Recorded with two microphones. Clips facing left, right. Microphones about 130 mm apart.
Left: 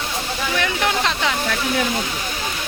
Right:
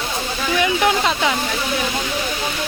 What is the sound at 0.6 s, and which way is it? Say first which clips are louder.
Speech: right 5 dB; 10° right (ahead or behind).